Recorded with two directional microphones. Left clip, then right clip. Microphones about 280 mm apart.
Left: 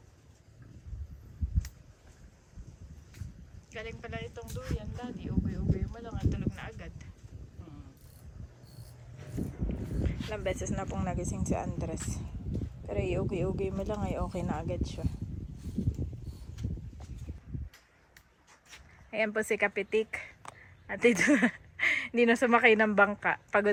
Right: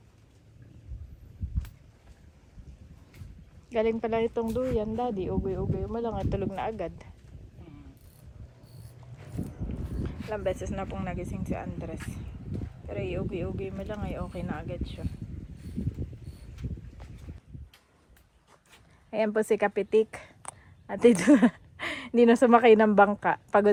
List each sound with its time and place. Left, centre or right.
3.8 s speech: centre
10.2 s speech: centre
19.1 s speech: centre